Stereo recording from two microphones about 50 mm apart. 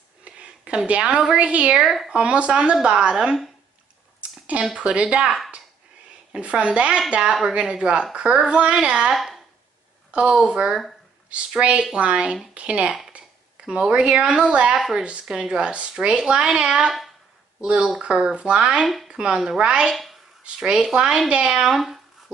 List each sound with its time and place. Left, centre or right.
0.2 s a woman's voice: right
1.8 s speech: centre
2.0 s a woman's voice: right
4.2 s a sound: right
4.7 s a woman's voice: right
6.3 s a woman's voice: right
9.1 s speech: centre
10.1 s a woman's voice: centre
10.7 s speech: centre
11.2 s a woman's voice: right
21.7 s speech: centre